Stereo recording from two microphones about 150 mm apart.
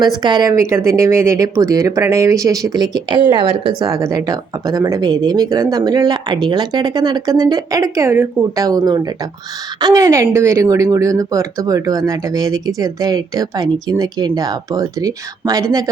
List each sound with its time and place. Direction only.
0.0 s speech: 30° right (ahead or behind)